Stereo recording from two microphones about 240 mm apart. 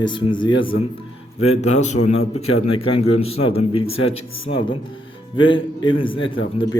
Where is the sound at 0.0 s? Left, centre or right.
Centre.